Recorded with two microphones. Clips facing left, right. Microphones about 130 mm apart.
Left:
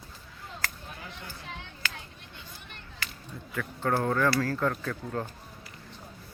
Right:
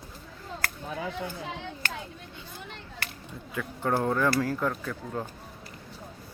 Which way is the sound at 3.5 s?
15° right (ahead or behind).